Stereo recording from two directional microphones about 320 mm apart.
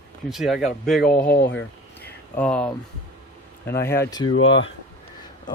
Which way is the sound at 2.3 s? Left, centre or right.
Centre.